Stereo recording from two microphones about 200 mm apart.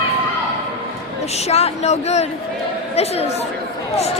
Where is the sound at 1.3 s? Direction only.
30° left (ahead or behind).